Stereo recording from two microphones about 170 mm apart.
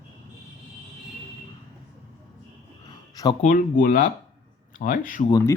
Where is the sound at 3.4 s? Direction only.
50° left (ahead or behind).